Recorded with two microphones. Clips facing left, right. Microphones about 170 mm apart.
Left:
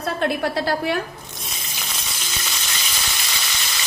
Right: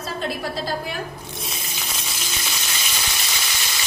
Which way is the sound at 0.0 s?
65° left (ahead or behind).